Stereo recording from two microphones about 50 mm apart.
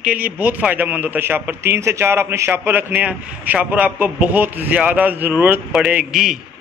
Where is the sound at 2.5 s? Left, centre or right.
Right.